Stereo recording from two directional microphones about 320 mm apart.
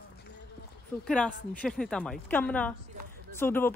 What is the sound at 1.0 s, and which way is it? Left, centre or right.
Speech, centre.